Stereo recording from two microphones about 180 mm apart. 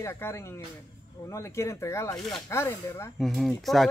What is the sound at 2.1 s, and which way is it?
Speech, centre (ahead or behind).